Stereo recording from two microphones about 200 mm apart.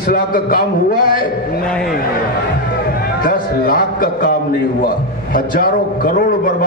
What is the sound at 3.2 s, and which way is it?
A man's voice, 45° left (ahead or behind).